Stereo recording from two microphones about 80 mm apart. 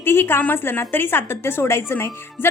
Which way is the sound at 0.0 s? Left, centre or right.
Left.